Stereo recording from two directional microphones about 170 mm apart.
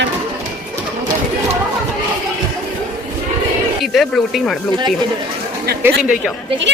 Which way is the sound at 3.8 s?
Centre (ahead or behind).